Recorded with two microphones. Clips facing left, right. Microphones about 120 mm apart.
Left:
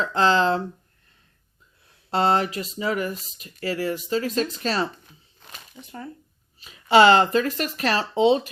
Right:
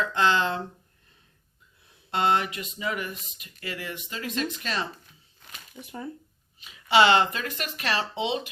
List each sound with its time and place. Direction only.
0.0 s speech: 35° left (ahead or behind)
2.0 s speech: 35° left (ahead or behind)
5.8 s speech: 10° right (ahead or behind)
6.6 s speech: 40° left (ahead or behind)